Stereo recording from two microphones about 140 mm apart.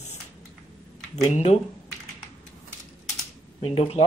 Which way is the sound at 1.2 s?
50° left (ahead or behind).